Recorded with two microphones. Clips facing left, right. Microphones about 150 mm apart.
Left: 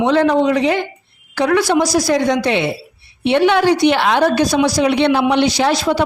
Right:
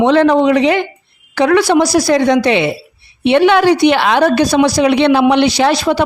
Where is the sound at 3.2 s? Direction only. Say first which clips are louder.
Right 3 dB; 90° right.